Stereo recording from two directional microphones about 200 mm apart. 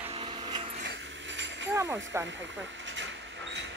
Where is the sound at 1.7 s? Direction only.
15° right (ahead or behind).